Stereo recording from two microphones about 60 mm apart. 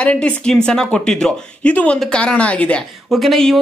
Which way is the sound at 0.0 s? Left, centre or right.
Centre.